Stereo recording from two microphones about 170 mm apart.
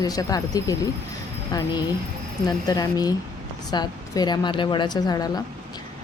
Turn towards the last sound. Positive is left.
turn(degrees=25)  # may be behind; listen again after turning